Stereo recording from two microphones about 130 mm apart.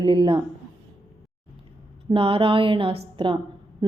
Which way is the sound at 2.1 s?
45° right (ahead or behind).